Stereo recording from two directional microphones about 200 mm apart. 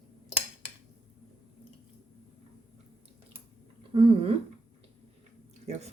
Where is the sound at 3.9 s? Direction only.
30° right (ahead or behind).